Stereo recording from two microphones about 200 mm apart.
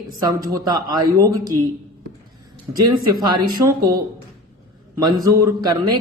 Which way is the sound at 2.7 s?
15° right (ahead or behind).